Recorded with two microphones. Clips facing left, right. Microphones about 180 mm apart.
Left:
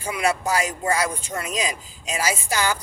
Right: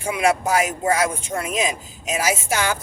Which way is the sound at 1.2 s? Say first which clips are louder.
Right 4 dB; 25° right (ahead or behind).